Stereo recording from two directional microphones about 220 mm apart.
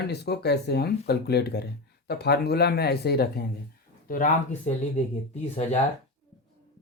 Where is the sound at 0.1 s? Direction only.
50° left (ahead or behind).